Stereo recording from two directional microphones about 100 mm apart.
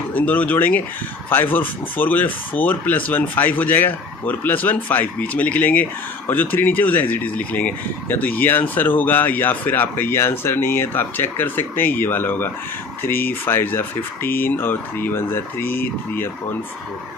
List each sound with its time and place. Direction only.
0.1 s speech: 15° left (ahead or behind)